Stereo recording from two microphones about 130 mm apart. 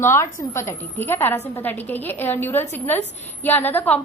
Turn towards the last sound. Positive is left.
turn(degrees=15)  # may be behind; listen again after turning